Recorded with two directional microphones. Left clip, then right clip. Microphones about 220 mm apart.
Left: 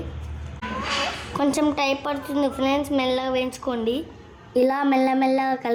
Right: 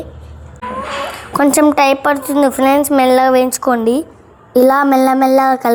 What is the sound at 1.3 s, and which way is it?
A woman's voice, 20° right (ahead or behind).